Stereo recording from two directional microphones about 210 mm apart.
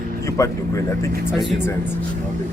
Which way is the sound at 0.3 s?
15° left (ahead or behind).